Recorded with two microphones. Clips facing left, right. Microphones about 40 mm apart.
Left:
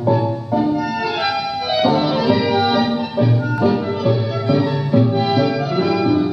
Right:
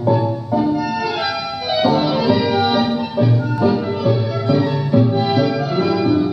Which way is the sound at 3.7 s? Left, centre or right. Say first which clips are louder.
Even; centre.